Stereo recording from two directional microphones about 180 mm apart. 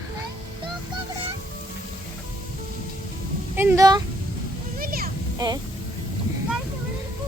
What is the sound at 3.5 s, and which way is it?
Speech, 15° right (ahead or behind).